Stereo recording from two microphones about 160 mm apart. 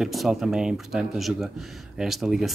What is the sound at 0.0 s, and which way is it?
Speech, centre (ahead or behind).